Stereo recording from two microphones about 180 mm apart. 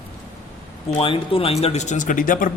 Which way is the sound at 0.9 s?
35° left (ahead or behind).